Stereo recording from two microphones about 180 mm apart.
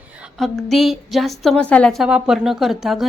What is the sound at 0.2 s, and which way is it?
A woman's voice, centre (ahead or behind).